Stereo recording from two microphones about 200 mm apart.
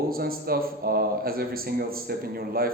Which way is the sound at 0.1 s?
50° right (ahead or behind).